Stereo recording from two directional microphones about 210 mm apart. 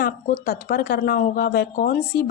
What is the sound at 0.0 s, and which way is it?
A woman's voice, 45° left (ahead or behind).